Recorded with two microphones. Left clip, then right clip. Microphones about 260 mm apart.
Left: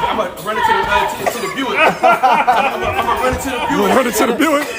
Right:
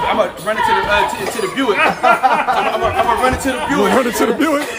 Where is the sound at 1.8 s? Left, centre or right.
Left.